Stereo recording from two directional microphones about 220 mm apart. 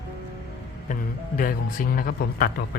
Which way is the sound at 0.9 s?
40° left (ahead or behind).